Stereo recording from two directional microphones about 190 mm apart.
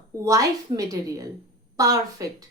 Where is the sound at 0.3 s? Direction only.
20° right (ahead or behind).